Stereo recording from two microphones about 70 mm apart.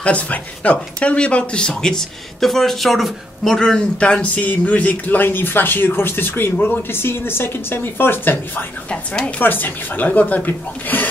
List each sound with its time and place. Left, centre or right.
0.0 s speech: centre
8.9 s a woman's voice: centre
9.4 s speech: left